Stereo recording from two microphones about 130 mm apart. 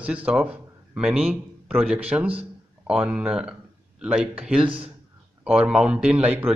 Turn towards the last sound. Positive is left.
turn(degrees=-10)  # may be behind; listen again after turning